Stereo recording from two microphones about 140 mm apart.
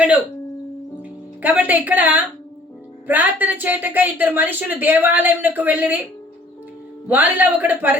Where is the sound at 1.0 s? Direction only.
10° right (ahead or behind).